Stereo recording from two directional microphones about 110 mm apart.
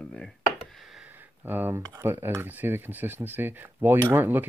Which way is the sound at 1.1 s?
20° right (ahead or behind).